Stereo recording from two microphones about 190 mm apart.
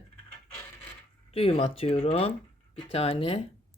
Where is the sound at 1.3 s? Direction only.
30° left (ahead or behind).